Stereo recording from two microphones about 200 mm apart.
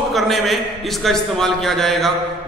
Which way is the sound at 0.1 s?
Centre (ahead or behind).